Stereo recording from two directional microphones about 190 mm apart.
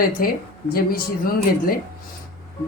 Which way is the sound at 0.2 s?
50° left (ahead or behind).